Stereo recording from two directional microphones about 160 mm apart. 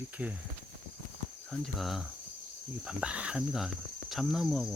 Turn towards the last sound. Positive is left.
turn(degrees=0)  # may be behind; listen again after turning